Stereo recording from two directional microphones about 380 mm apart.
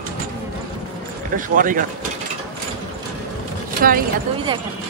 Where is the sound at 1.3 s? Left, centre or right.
Right.